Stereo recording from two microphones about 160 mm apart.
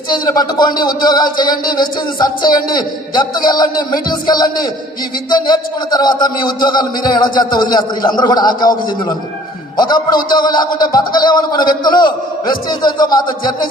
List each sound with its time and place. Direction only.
0.1 s speech: 25° left (ahead or behind)